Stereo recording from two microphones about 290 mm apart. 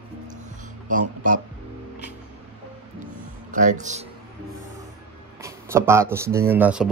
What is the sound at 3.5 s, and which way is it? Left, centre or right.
Speech, right.